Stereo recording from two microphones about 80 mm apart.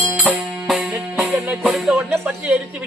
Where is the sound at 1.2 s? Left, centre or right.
Centre.